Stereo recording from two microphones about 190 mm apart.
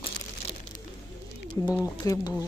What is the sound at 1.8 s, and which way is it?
Speech, 15° left (ahead or behind).